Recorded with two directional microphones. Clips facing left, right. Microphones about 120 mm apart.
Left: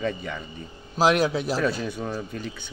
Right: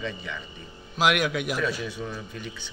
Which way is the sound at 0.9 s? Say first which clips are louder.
Left 3 dB; 35° left (ahead or behind).